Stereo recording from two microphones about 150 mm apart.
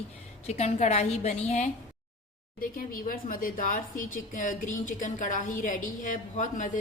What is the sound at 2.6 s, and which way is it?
A woman's voice, 70° left (ahead or behind).